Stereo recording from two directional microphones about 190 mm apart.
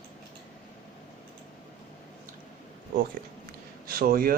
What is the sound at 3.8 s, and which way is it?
Speech, 50° right (ahead or behind).